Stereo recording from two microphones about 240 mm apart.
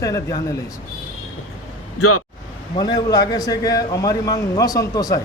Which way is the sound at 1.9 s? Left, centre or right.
Left.